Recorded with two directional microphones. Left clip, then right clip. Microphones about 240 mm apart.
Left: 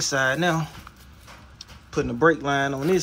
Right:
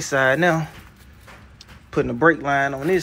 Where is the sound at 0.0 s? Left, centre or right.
Centre.